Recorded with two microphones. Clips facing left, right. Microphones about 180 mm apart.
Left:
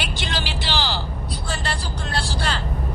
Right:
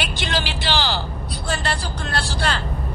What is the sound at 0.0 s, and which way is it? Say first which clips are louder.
Vehicle: right 3 dB; 65° right (ahead or behind).